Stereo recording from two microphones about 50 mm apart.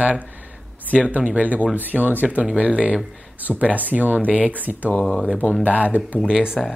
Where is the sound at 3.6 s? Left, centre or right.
Right.